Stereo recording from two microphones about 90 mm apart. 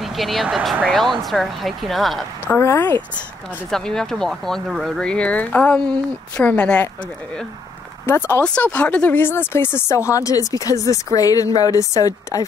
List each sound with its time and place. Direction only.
0.0 s a woman's voice: centre (ahead or behind)
2.6 s speech: 30° left (ahead or behind)
3.7 s speech: 5° left (ahead or behind)
8.4 s speech: 10° left (ahead or behind); by 12.4 s 40° left (ahead or behind)